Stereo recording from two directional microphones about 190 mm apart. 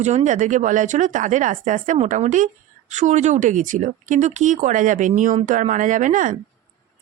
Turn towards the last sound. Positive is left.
turn(degrees=-45)  # may be behind; listen again after turning